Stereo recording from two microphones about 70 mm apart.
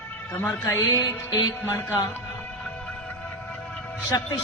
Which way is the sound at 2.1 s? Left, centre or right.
Left.